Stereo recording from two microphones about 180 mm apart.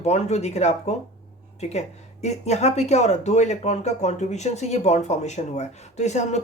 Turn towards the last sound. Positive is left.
turn(degrees=40)  # may be behind; listen again after turning